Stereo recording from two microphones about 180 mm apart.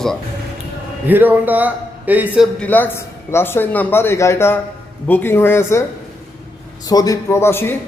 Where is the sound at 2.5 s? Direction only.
10° left (ahead or behind).